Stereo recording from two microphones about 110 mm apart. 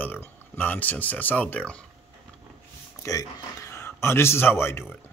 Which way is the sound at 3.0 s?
30° left (ahead or behind).